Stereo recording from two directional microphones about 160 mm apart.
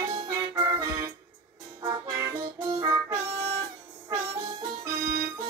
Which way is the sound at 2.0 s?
15° right (ahead or behind).